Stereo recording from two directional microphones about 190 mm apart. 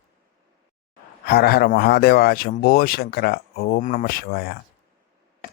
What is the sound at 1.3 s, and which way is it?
Speech, 55° left (ahead or behind).